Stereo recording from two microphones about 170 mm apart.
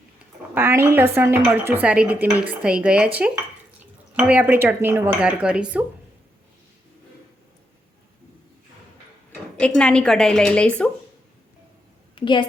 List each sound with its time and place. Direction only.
0.5 s speech: 15° right (ahead or behind)
9.6 s a woman's voice: 5° left (ahead or behind)
12.1 s a woman's voice: 30° left (ahead or behind)